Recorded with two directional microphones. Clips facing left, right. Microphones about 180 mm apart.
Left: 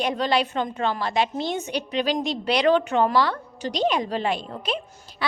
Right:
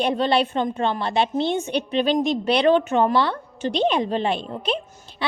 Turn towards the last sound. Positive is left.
turn(degrees=-25)  # may be behind; listen again after turning